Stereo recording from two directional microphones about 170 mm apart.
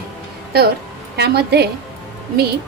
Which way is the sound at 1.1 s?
75° right (ahead or behind).